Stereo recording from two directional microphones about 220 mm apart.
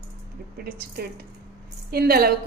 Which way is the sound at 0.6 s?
45° right (ahead or behind).